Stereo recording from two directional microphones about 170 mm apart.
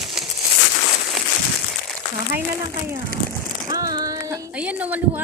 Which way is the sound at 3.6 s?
20° right (ahead or behind).